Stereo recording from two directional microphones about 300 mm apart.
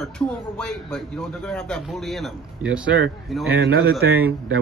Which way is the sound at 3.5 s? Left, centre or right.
Right.